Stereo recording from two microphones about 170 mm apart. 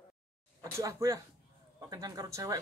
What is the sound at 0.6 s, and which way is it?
Speech, 20° right (ahead or behind).